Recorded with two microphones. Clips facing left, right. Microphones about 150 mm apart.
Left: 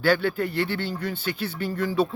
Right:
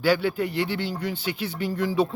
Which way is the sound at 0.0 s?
10° right (ahead or behind).